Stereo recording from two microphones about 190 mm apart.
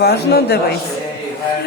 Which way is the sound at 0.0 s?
60° left (ahead or behind).